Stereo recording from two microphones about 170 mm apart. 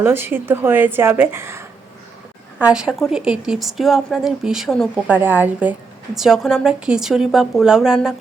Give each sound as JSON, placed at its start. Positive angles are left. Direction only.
{"t": 0.0, "sound": "a woman's voice", "side_deg": -15}